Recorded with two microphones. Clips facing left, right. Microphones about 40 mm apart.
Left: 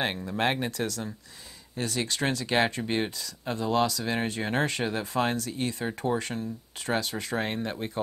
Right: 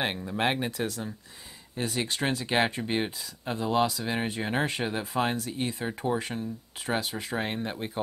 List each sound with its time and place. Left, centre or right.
0.0 s speech: centre
3.1 s speech: right